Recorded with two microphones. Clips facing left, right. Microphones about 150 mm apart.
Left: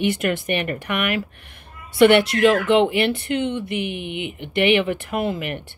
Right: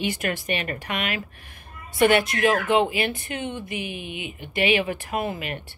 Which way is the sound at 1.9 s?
75° left (ahead or behind).